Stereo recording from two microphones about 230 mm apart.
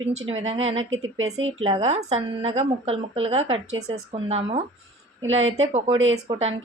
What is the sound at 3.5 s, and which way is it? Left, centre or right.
Speech, right.